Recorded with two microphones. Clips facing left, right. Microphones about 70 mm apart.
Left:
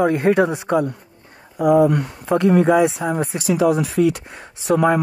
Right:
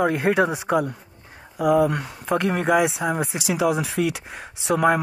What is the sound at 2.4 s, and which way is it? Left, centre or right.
Speech, right.